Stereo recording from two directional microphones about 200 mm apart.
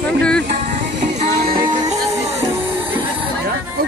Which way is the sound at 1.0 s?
30° right (ahead or behind).